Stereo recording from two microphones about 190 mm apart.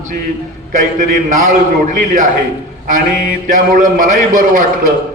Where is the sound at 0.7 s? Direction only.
40° right (ahead or behind).